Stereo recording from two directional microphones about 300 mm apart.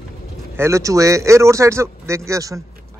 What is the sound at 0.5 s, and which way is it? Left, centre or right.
Speech, centre.